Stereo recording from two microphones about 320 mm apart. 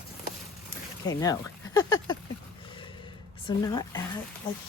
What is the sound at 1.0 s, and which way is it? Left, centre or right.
Speech, centre.